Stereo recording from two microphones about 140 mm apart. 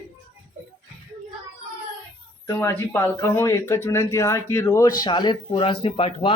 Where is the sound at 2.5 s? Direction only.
15° left (ahead or behind); by 6.3 s 40° left (ahead or behind).